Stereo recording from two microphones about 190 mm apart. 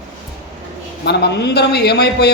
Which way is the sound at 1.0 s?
60° left (ahead or behind).